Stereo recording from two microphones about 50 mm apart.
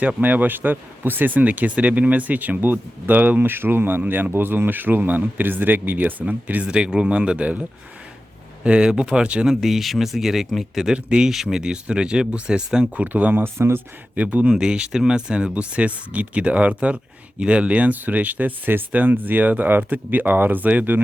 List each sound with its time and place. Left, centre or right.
0.2 s speech: right
8.6 s speech: centre
9.5 s speech: centre
10.9 s speech: centre
12.9 s speech: right
13.4 s speech: right
14.2 s speech: right
14.6 s speech: centre; by 21.0 s right